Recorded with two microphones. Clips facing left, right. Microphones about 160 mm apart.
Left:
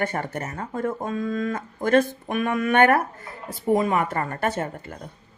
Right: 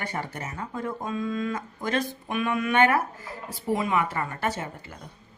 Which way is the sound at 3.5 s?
45° left (ahead or behind).